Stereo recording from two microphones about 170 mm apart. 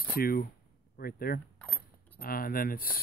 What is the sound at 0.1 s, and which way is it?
Speech, 60° left (ahead or behind).